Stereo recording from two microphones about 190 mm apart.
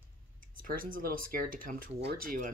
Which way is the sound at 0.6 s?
50° right (ahead or behind).